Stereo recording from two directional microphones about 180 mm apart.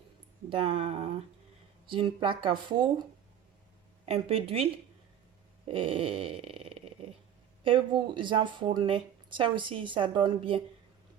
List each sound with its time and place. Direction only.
0.5 s speech: 35° right (ahead or behind)
4.0 s speech: 35° right (ahead or behind)
5.6 s a sound: 30° right (ahead or behind)
7.6 s speech: 30° right (ahead or behind)